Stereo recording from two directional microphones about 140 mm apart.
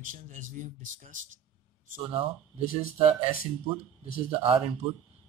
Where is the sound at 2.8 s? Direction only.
45° right (ahead or behind).